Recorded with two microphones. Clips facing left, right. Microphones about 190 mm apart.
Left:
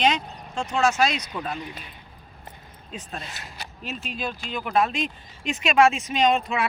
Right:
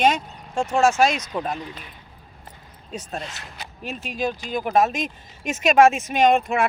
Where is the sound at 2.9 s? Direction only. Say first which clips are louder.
Right 4 dB; 45° right (ahead or behind).